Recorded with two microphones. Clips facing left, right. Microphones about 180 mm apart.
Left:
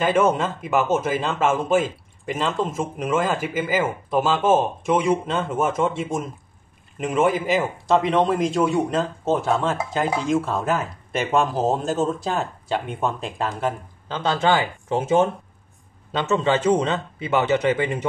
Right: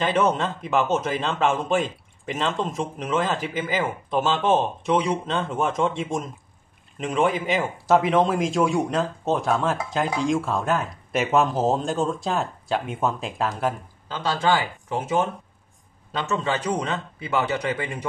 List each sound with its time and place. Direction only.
0.0 s a man's voice: 10° left (ahead or behind)
14.1 s speech: 20° left (ahead or behind)